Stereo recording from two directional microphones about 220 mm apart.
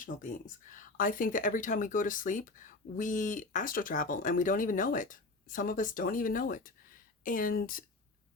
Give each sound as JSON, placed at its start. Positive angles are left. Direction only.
{"t": 0.0, "sound": "speech", "side_deg": 35}